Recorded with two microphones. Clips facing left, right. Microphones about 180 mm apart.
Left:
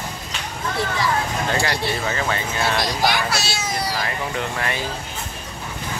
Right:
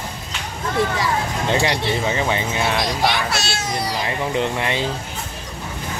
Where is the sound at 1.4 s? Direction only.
20° right (ahead or behind).